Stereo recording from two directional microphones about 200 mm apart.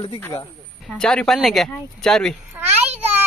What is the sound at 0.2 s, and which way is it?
Speech, 20° left (ahead or behind).